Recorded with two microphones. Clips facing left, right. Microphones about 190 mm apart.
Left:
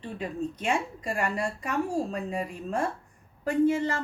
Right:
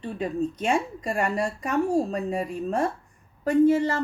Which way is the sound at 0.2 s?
40° right (ahead or behind).